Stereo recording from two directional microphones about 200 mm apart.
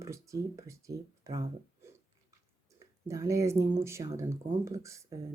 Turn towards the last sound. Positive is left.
turn(degrees=-15)  # may be behind; listen again after turning